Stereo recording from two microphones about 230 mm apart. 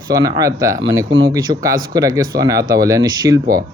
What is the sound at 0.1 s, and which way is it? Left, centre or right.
Speech, centre.